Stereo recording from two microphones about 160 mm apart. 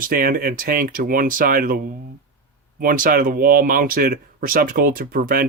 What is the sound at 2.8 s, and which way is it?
Speech, 60° right (ahead or behind).